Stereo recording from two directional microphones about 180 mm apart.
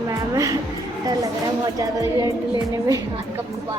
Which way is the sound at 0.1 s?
20° right (ahead or behind).